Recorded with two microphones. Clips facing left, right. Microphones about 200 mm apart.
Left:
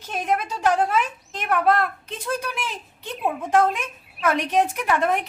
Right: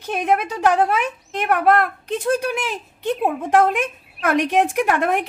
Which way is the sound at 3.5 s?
60° right (ahead or behind).